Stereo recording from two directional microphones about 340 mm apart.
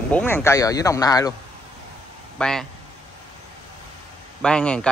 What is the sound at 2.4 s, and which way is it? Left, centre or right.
Speech, centre.